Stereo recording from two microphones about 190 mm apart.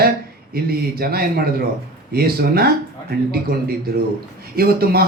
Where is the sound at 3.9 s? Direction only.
55° right (ahead or behind).